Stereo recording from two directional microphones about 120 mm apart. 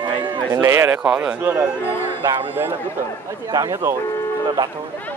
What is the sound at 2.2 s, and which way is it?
Speech, 35° right (ahead or behind).